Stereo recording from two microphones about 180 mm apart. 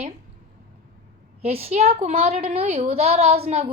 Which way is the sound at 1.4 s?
35° right (ahead or behind).